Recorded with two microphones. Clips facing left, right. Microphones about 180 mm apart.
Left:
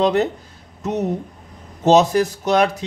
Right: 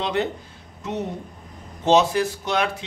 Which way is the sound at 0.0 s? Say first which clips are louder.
Left 7 dB; 40° left (ahead or behind).